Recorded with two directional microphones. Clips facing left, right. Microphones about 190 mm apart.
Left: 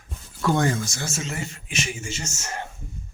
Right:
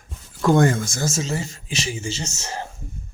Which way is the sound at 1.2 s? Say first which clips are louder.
Right 5 dB; 35° right (ahead or behind).